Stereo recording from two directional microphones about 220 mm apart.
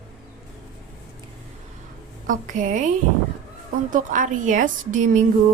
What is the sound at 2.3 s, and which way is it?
Speech, 35° right (ahead or behind).